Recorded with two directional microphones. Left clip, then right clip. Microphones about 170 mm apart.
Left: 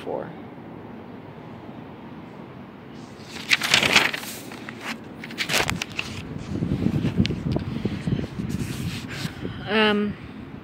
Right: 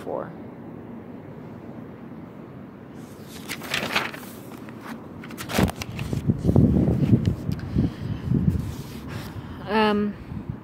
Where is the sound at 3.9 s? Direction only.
40° left (ahead or behind).